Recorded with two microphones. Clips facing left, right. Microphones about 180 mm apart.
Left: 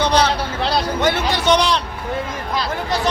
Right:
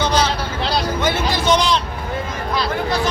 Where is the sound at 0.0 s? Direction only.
65° left (ahead or behind).